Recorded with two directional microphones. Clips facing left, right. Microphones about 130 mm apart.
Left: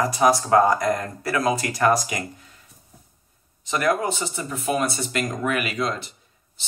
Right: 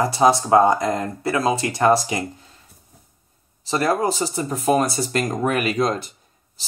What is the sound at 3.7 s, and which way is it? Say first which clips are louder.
Speech: right 2 dB; 35° right (ahead or behind).